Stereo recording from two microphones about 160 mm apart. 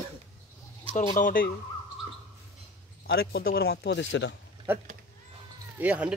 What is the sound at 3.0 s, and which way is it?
Speech, 75° left (ahead or behind).